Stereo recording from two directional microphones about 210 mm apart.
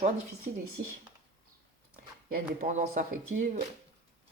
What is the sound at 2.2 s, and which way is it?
Speech, 35° right (ahead or behind).